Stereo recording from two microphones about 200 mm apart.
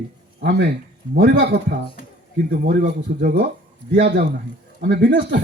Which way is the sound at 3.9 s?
55° right (ahead or behind).